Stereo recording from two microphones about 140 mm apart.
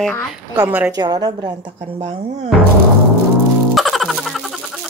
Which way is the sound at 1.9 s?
45° right (ahead or behind).